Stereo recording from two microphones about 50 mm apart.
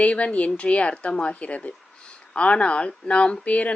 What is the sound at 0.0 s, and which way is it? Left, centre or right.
Speech, left.